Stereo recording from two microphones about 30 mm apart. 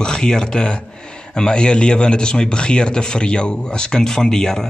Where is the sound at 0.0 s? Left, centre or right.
Left.